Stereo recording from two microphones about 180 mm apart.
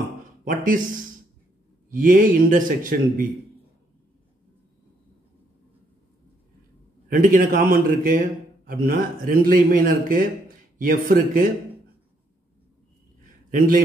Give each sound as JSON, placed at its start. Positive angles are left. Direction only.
{"t": 0.5, "sound": "a man's voice", "side_deg": -50}
{"t": 7.1, "sound": "a man's voice", "side_deg": -50}
{"t": 13.5, "sound": "a man's voice", "side_deg": -50}